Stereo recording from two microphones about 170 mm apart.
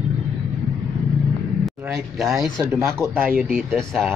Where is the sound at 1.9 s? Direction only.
Centre (ahead or behind).